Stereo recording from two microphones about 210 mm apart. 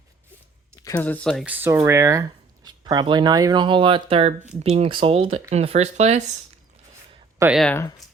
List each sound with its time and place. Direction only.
0.9 s speech: 10° left (ahead or behind)
1.5 s speech: 10° right (ahead or behind); by 6.2 s 30° right (ahead or behind)
7.3 s speech: 10° right (ahead or behind)
7.6 s speech: 5° left (ahead or behind)